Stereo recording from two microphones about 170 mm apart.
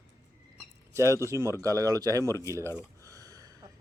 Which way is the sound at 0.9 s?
15° right (ahead or behind).